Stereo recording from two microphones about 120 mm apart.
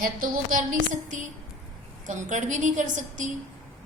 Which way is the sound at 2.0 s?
90° right.